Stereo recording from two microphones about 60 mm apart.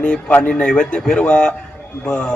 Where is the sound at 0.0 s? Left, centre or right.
Left.